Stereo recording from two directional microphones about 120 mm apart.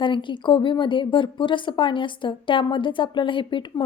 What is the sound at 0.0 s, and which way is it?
A woman's voice, 45° left (ahead or behind).